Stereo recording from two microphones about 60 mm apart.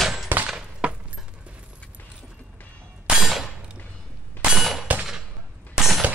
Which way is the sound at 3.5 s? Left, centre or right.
Centre.